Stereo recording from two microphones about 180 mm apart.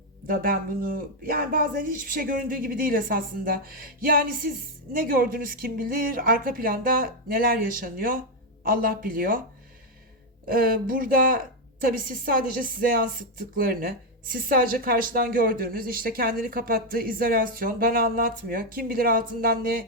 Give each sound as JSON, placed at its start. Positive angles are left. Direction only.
{"t": 0.3, "sound": "a woman's voice", "side_deg": -55}
{"t": 10.4, "sound": "a woman's voice", "side_deg": -55}